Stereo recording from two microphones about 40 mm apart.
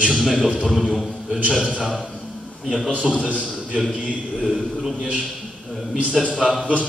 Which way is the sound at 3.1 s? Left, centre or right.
Right.